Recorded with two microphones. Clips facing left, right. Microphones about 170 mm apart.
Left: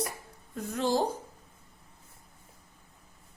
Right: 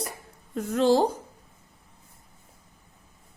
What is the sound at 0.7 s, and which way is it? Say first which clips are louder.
Speech: right 8 dB; 90° right.